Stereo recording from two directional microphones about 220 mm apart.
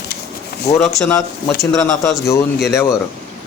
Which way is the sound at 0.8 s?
5° left (ahead or behind).